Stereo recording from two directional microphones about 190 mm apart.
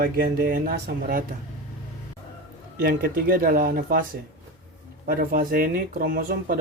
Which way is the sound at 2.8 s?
55° right (ahead or behind).